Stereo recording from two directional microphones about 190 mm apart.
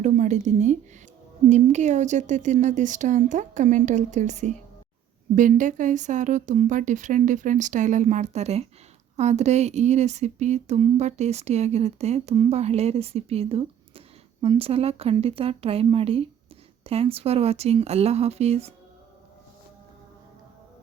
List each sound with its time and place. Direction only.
0.0 s speech: 40° right (ahead or behind)